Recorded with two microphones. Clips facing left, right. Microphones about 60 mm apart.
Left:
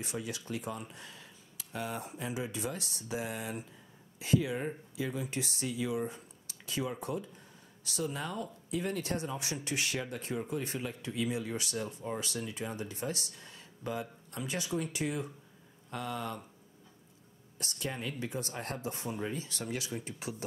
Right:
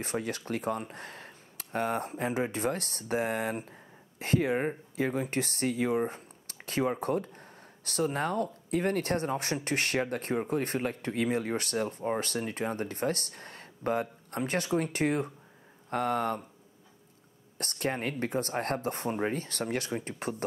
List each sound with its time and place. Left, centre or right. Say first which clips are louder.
0.0 s speech: right 6 dB; right
17.6 s speech: right 7 dB; right